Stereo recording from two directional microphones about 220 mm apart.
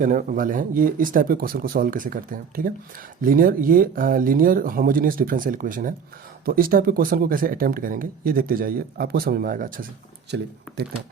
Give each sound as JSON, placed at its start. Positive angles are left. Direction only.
{"t": 0.0, "sound": "speech", "side_deg": -35}
{"t": 10.7, "sound": "speech", "side_deg": 5}